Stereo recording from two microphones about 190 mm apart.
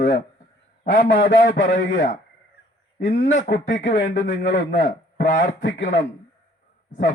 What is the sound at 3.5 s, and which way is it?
Speech, 40° left (ahead or behind).